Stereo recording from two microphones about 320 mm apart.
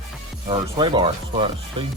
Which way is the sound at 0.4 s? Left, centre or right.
Centre.